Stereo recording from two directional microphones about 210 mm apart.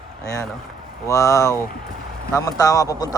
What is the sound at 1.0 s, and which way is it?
Speech, 15° left (ahead or behind).